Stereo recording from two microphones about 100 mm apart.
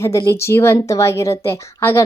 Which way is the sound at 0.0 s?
30° left (ahead or behind).